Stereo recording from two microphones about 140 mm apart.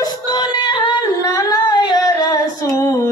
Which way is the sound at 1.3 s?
30° left (ahead or behind).